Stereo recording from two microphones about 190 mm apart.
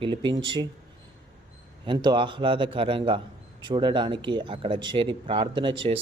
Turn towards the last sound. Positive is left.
turn(degrees=-25)  # may be behind; listen again after turning